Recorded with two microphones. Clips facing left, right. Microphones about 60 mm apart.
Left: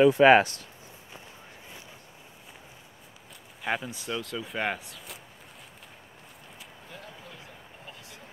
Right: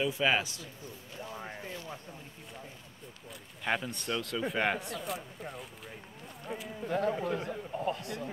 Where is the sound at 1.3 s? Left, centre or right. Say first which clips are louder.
Right 7 dB; right.